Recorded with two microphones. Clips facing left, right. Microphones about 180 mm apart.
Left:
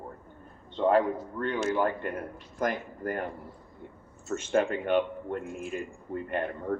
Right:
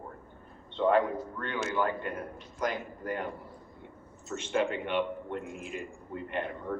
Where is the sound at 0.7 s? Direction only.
40° left (ahead or behind).